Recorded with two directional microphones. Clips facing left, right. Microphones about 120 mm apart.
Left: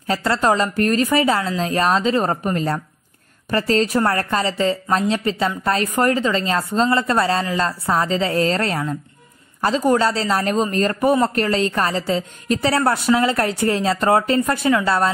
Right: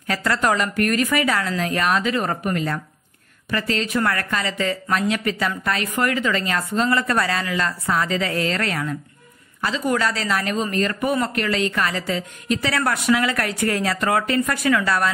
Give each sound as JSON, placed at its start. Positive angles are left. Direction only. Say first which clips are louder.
{"t": 0.0, "sound": "a woman's voice", "louder": "left 3 dB", "side_deg": 30}
{"t": 9.6, "sound": "speech", "louder": "left 5 dB", "side_deg": 40}